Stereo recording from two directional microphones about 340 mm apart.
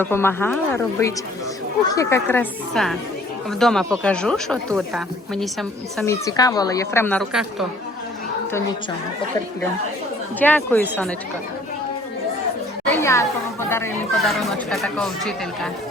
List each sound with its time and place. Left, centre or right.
0.0 s a woman's voice: centre
10.4 s a woman's voice: centre
12.8 s a woman's voice: centre